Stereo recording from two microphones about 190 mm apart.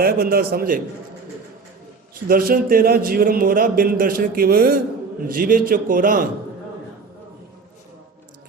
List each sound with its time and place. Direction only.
0.0 s a man's voice: 55° right (ahead or behind)
2.2 s a man's voice: 50° right (ahead or behind)